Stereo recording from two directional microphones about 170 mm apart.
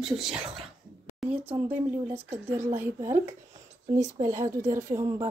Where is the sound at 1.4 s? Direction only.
10° right (ahead or behind).